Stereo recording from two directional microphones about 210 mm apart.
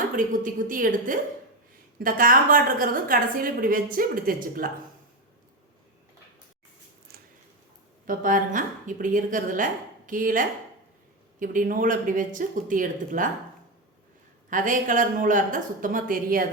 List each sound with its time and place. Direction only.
0.2 s a woman's voice: 40° right (ahead or behind)
7.1 s a sound: 50° right (ahead or behind)
8.0 s a woman's voice: 40° right (ahead or behind)
14.5 s a woman's voice: 40° right (ahead or behind)